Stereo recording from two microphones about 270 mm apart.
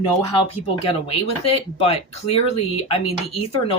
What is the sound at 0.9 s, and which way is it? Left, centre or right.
Speech, left.